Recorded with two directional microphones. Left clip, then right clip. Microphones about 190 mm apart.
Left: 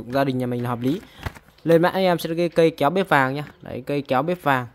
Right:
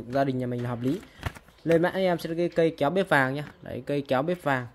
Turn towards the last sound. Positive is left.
turn(degrees=30)  # may be behind; listen again after turning